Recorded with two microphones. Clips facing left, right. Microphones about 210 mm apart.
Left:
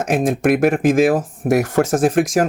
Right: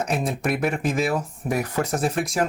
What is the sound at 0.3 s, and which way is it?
Speech, 90° left.